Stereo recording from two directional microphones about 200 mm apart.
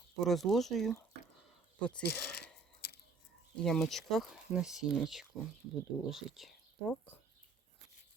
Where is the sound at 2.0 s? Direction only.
55° left (ahead or behind).